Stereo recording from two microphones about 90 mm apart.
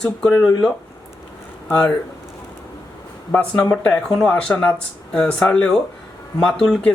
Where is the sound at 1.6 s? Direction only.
20° left (ahead or behind).